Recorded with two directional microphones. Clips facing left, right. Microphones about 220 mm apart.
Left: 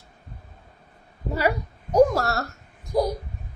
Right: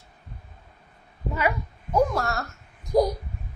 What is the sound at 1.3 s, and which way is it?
A woman's voice, 40° left (ahead or behind).